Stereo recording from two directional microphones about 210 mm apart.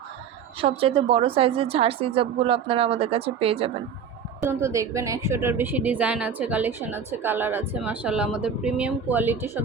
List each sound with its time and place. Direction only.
0.6 s a woman's voice: 25° right (ahead or behind)
4.4 s a woman's voice: 15° right (ahead or behind)